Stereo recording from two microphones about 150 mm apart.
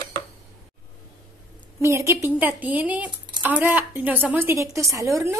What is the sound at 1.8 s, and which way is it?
A woman's voice, 20° right (ahead or behind).